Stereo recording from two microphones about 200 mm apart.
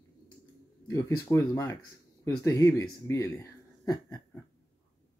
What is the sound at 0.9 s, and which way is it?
Speech, 15° left (ahead or behind).